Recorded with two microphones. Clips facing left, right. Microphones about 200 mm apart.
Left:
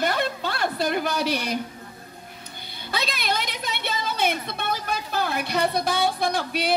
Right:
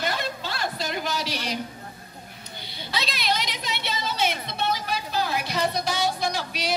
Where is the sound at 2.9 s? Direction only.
50° left (ahead or behind).